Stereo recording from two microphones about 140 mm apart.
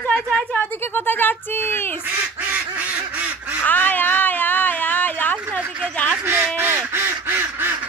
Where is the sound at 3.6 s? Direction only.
15° left (ahead or behind).